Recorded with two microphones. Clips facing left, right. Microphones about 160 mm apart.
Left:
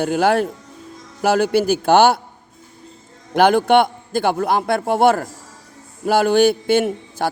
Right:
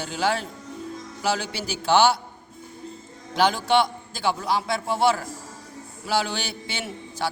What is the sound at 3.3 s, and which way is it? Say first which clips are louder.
A man's voice: left 7 dB; 55° left (ahead or behind).